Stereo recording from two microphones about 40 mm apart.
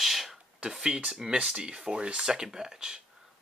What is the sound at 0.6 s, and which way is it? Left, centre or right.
Speech, centre.